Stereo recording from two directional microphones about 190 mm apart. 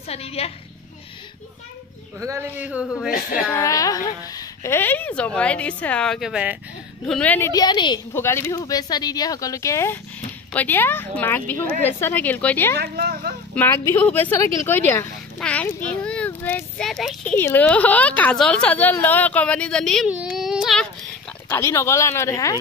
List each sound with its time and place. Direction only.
0.1 s a woman's voice: 30° left (ahead or behind)
2.2 s speech: 10° right (ahead or behind)
3.5 s a child's voice: 15° left (ahead or behind); by 6.6 s 5° right (ahead or behind)
7.1 s a child's voice: 5° left (ahead or behind); by 8.0 s 25° left (ahead or behind)
8.1 s a child's voice: 15° left (ahead or behind)
12.7 s speech: 55° right (ahead or behind)
13.6 s a child's voice: 15° left (ahead or behind); by 20.8 s centre (ahead or behind)
21.5 s a child's voice: 15° left (ahead or behind)